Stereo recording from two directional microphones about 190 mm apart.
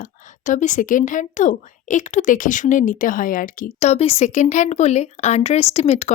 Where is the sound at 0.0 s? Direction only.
40° left (ahead or behind).